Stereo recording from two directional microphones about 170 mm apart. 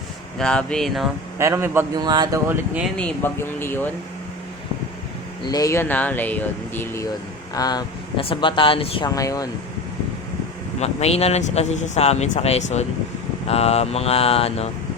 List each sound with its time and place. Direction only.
0.3 s speech: 5° left (ahead or behind)
1.4 s speech: 15° right (ahead or behind)
3.0 s speech: 10° left (ahead or behind)
5.5 s speech: 20° left (ahead or behind)
10.8 s speech: 40° left (ahead or behind)